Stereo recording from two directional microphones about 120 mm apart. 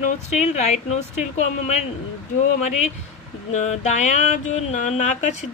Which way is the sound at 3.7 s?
75° left (ahead or behind).